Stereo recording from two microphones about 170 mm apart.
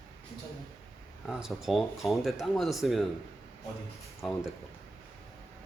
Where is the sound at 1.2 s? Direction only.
Centre (ahead or behind).